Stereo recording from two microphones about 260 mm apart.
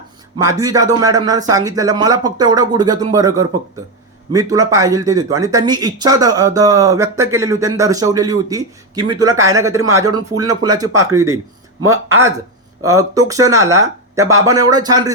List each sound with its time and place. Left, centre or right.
0.6 s speech: centre